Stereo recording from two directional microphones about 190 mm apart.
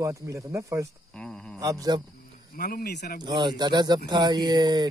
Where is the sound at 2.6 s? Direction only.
55° left (ahead or behind).